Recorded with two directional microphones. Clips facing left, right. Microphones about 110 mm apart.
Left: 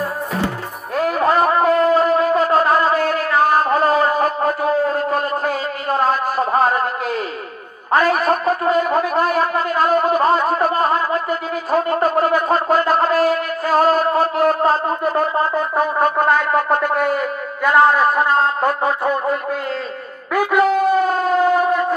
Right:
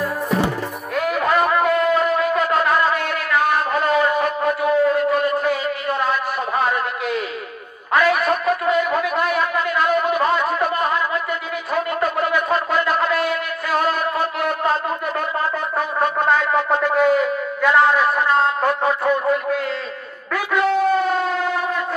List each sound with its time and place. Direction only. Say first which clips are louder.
0.9 s shofar: left 3 dB; 35° left (ahead or behind)
7.9 s a sound: left 2 dB; 40° left (ahead or behind)
11.7 s shofar: left 5 dB; 40° left (ahead or behind)
17.6 s a sound: left 2 dB; 45° left (ahead or behind)
20.3 s shofar: left 4 dB; 45° left (ahead or behind)
20.7 s civil defense siren: left 2 dB; 10° left (ahead or behind)
21.0 s civil defense siren: left 4 dB; 45° left (ahead or behind)